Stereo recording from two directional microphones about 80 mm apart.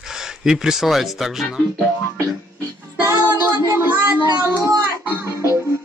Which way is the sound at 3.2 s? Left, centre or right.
Right.